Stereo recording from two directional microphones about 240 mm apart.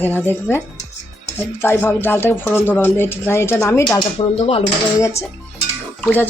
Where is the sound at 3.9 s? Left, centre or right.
Left.